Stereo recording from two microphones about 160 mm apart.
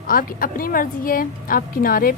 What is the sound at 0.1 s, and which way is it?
Speech, 60° left (ahead or behind).